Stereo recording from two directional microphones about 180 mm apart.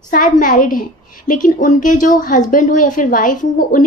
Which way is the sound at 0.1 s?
45° left (ahead or behind).